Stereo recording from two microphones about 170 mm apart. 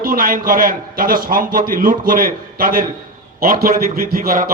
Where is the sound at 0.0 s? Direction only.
55° right (ahead or behind).